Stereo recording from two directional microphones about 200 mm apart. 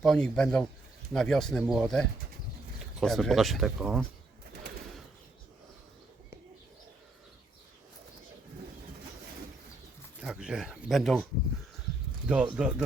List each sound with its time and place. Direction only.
0.0 s speech: 5° left (ahead or behind)
10.2 s speech: 5° right (ahead or behind)
12.3 s speech: 5° right (ahead or behind)